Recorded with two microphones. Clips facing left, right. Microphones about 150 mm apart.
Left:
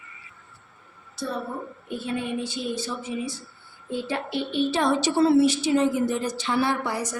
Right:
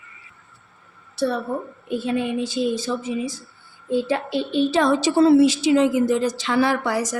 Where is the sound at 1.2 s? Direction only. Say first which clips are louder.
Right 9 dB; 70° right (ahead or behind).